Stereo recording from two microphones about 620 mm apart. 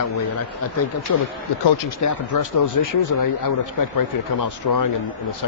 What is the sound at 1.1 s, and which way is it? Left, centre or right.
Speech, left.